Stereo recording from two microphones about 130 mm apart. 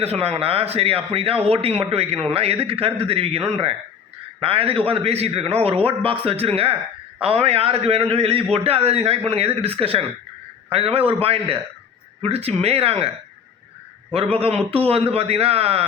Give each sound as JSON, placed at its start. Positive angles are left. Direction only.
{"t": 0.0, "sound": "a man's voice", "side_deg": -50}
{"t": 14.3, "sound": "a man's voice", "side_deg": -50}